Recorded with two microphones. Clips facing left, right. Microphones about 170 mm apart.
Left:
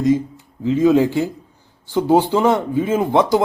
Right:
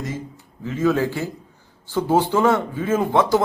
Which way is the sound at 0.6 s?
20° left (ahead or behind).